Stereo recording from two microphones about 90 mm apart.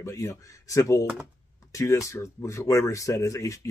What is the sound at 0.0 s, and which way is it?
Speech, 35° left (ahead or behind).